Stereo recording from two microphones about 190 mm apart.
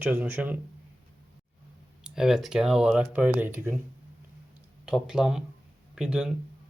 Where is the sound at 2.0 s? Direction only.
5° right (ahead or behind).